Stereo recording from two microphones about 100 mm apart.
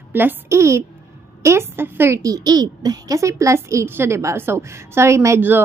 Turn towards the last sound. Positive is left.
turn(degrees=-25)  # may be behind; listen again after turning